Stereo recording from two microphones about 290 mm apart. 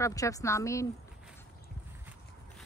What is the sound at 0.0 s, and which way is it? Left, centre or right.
Speech, centre.